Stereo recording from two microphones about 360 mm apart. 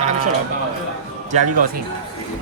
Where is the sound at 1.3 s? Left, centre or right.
Centre.